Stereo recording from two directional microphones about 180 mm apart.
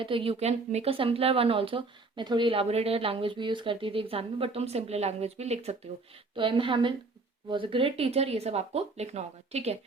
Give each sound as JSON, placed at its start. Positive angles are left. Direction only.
{"t": 0.0, "sound": "a woman's voice", "side_deg": -30}